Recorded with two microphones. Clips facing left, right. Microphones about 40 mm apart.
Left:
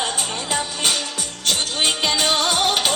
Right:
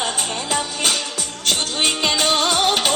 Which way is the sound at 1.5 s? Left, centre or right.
Right.